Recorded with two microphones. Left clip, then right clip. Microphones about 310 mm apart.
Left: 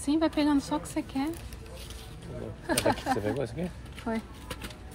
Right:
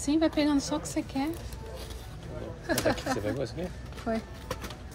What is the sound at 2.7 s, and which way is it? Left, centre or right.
A woman's voice, centre.